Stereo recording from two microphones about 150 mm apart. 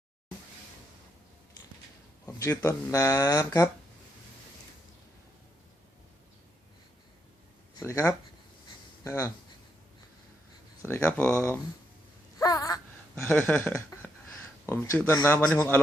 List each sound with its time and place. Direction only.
2.2 s speech: 20° left (ahead or behind)
7.8 s speech: 20° left (ahead or behind)
10.8 s speech: 15° left (ahead or behind)
12.4 s a sound: 25° left (ahead or behind)
13.2 s a sound: 10° left (ahead or behind)
14.7 s speech: 15° left (ahead or behind)